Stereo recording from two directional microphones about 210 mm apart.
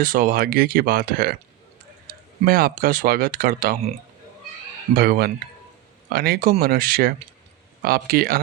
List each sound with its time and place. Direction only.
0.0 s speech: 40° right (ahead or behind)
4.9 s speech: 45° right (ahead or behind)